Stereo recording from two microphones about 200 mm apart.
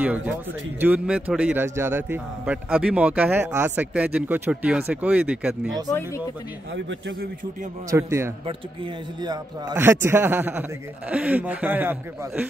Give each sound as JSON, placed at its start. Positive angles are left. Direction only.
{"t": 0.0, "sound": "a man's voice", "side_deg": -5}
{"t": 6.7, "sound": "a man's voice", "side_deg": -55}
{"t": 7.9, "sound": "a man's voice", "side_deg": -15}